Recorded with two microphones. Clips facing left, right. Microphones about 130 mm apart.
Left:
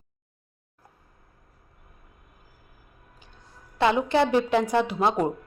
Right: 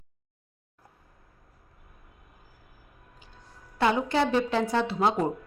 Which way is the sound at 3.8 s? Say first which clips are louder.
Left 3 dB; 20° left (ahead or behind).